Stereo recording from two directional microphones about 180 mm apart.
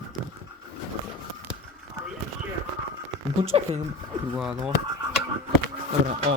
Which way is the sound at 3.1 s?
35° right (ahead or behind).